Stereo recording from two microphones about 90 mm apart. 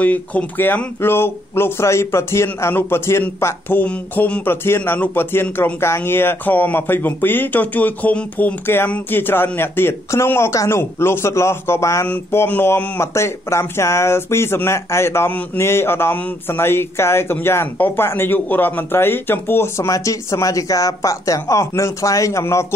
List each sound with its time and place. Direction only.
0.0 s speech: 15° left (ahead or behind); by 12.1 s 35° left (ahead or behind)
12.1 s speech: 20° left (ahead or behind)